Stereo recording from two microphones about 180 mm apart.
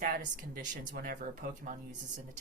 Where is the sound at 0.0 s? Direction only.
50° right (ahead or behind).